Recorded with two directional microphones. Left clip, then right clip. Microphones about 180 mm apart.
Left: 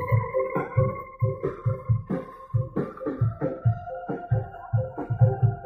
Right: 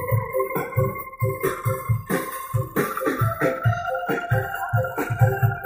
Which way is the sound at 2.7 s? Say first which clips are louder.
Right 8 dB; 70° right (ahead or behind).